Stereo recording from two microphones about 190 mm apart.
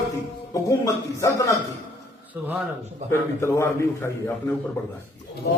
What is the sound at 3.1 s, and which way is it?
Speech, 15° left (ahead or behind).